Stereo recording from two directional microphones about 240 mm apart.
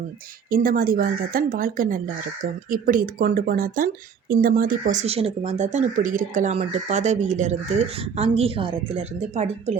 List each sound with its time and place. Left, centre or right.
0.5 s a woman's voice: right